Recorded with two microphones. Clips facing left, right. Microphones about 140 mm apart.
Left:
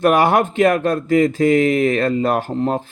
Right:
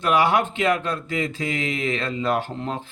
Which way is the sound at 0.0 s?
50° left (ahead or behind).